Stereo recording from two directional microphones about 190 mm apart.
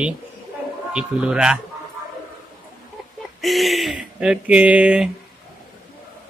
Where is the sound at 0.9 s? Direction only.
5° right (ahead or behind).